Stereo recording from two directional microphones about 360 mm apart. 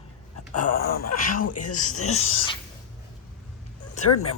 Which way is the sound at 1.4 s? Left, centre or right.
Left.